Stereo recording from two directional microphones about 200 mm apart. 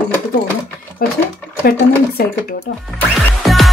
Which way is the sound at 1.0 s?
45° left (ahead or behind).